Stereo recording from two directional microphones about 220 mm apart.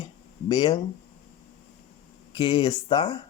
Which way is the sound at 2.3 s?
20° left (ahead or behind).